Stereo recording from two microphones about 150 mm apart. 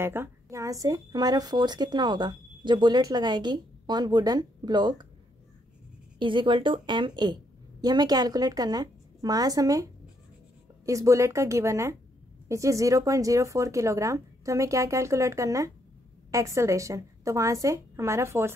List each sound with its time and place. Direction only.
0.0 s a woman's voice: 15° right (ahead or behind)
6.1 s a woman's voice: 35° right (ahead or behind)
10.9 s a woman's voice: 20° right (ahead or behind)